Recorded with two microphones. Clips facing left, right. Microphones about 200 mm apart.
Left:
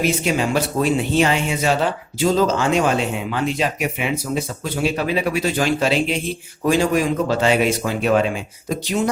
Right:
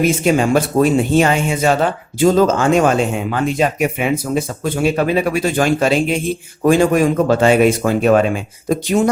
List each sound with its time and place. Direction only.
0.0 s speech: 50° right (ahead or behind)